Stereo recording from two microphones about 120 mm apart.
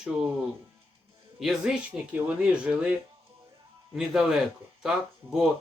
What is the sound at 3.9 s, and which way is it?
Speech, centre (ahead or behind).